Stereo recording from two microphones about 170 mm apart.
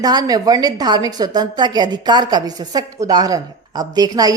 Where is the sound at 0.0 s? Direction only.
20° right (ahead or behind).